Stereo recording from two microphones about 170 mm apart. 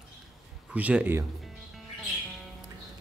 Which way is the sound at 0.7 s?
10° right (ahead or behind).